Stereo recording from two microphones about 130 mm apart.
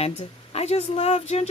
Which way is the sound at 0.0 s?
50° left (ahead or behind).